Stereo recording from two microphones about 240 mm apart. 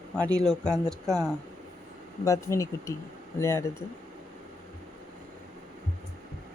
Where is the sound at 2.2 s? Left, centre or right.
Centre.